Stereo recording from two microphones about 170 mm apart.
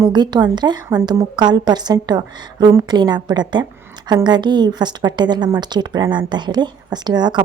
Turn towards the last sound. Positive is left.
turn(degrees=-25)  # may be behind; listen again after turning